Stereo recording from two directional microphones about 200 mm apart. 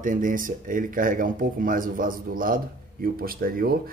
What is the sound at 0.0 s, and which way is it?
Speech, 40° right (ahead or behind).